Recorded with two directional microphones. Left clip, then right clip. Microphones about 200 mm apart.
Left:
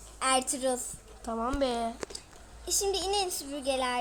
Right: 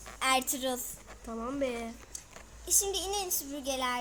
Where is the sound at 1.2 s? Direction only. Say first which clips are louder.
Left 4 dB; 35° left (ahead or behind).